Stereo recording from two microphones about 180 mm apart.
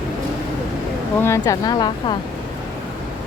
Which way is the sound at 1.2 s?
15° left (ahead or behind).